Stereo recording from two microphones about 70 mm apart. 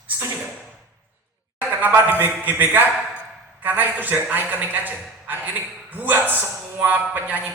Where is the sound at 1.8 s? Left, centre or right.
Right.